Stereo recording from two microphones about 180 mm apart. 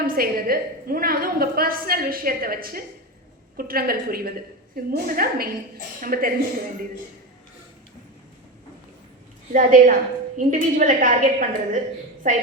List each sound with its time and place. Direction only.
0.0 s a woman's voice: 55° right (ahead or behind)
9.5 s a woman's voice: 45° right (ahead or behind)